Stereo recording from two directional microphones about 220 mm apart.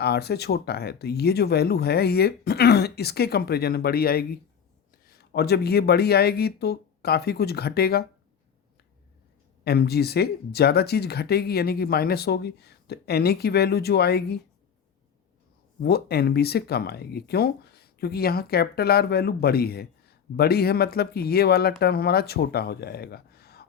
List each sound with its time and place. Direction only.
0.0 s speech: 50° left (ahead or behind)
9.6 s speech: 45° left (ahead or behind)
15.8 s speech: 45° left (ahead or behind)